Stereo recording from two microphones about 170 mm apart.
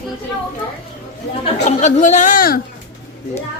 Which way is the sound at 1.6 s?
45° left (ahead or behind).